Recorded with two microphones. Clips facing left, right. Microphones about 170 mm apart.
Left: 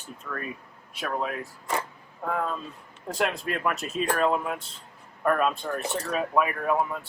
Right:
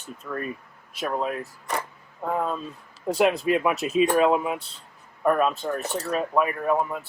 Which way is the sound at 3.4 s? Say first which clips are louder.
Right 6 dB; 5° right (ahead or behind).